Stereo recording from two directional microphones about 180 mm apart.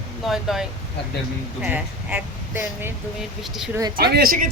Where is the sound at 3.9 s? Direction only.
60° right (ahead or behind).